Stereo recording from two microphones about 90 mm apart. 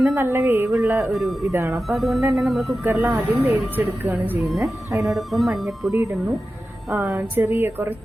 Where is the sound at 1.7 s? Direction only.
Centre (ahead or behind).